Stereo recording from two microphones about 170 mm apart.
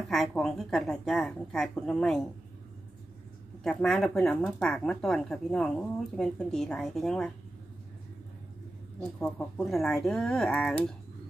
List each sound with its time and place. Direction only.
0.0 s speech: centre (ahead or behind)
3.6 s speech: centre (ahead or behind)
9.2 s speech: 10° left (ahead or behind)